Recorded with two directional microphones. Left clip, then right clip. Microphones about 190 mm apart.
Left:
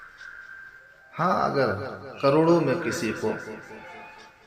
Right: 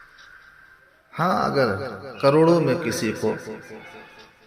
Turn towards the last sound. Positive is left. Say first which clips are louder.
# right 3 dB
turn(degrees=-30)  # may be behind; listen again after turning